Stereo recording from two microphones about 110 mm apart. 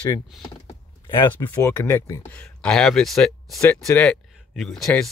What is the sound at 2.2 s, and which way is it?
Speech, 10° left (ahead or behind).